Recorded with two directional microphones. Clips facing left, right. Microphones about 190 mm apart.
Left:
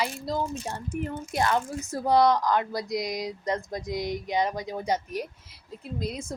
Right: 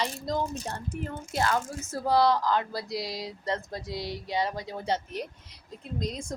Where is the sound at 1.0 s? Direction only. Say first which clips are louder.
Left 3 dB; 20° left (ahead or behind).